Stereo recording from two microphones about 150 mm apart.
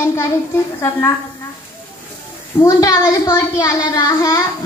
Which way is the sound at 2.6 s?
20° left (ahead or behind).